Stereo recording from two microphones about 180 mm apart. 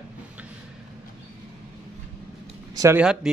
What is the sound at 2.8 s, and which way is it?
Speech, 10° right (ahead or behind).